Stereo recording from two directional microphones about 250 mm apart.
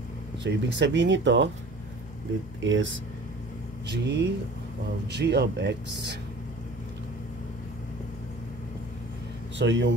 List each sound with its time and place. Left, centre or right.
0.4 s speech: right
2.6 s speech: right
9.6 s speech: right